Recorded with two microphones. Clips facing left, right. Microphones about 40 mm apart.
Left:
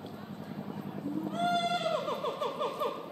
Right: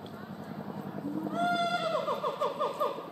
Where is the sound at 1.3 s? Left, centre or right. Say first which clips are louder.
Right 1 dB; left.